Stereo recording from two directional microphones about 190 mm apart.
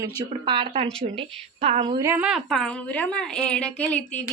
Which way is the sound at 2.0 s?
10° right (ahead or behind).